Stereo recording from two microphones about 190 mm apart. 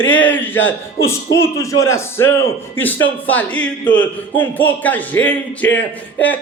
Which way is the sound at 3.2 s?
10° left (ahead or behind).